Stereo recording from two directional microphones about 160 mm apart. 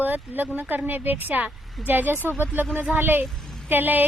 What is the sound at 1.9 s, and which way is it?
Speech, 10° right (ahead or behind).